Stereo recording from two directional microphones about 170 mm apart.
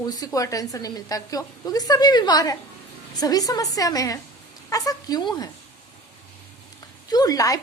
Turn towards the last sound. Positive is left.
turn(degrees=20)  # may be behind; listen again after turning